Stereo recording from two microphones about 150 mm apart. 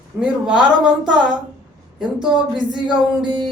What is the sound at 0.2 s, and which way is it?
Speech, 5° right (ahead or behind).